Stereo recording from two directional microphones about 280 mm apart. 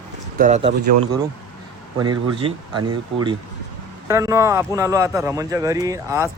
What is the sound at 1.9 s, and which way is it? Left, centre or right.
Speech, centre.